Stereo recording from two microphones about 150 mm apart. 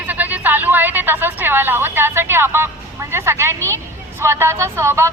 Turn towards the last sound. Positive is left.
turn(degrees=-15)  # may be behind; listen again after turning